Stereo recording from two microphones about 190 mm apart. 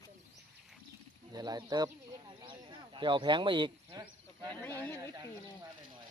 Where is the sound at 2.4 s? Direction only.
25° right (ahead or behind).